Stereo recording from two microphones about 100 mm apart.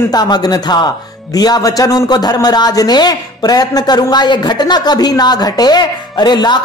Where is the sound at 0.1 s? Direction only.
40° left (ahead or behind).